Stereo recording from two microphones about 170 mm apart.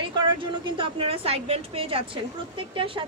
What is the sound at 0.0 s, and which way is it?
A woman's voice, 30° right (ahead or behind).